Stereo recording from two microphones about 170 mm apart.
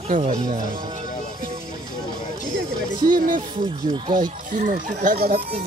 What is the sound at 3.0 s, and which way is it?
Speech, 55° right (ahead or behind).